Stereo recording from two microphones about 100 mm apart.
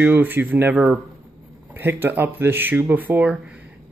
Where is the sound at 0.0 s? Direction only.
20° right (ahead or behind).